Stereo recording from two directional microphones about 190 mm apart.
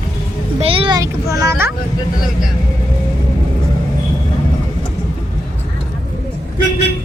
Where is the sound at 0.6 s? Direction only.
30° right (ahead or behind).